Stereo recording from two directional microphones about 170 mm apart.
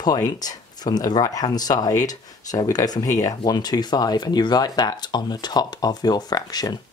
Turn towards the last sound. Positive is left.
turn(degrees=25)  # may be behind; listen again after turning